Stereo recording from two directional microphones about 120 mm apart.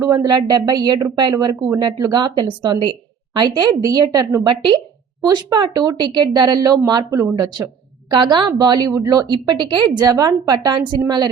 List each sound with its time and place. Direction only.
0.0 s a woman's voice: 30° right (ahead or behind)